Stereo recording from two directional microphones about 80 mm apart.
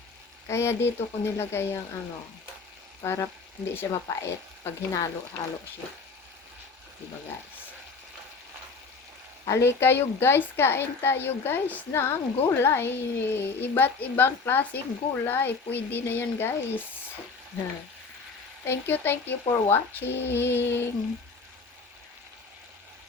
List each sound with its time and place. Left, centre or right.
0.4 s speech: left
3.0 s frying: left
3.8 s speech: left
9.5 s a woman's voice: left
18.6 s a woman's voice: left